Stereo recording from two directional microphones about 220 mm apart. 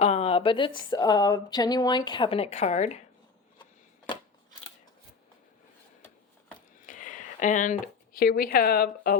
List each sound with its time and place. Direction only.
0.0 s speech: 30° left (ahead or behind)
6.8 s speech: 35° left (ahead or behind)